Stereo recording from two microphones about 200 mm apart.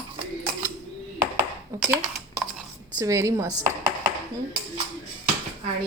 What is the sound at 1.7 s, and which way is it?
Speech, 15° right (ahead or behind).